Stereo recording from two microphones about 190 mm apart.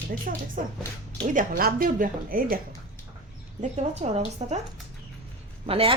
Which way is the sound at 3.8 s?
35° right (ahead or behind).